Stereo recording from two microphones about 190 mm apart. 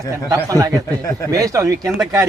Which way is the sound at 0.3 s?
20° right (ahead or behind).